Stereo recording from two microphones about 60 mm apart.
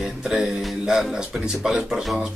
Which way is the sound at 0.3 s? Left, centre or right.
Centre.